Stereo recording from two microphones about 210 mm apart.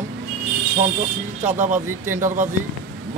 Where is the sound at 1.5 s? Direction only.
35° right (ahead or behind).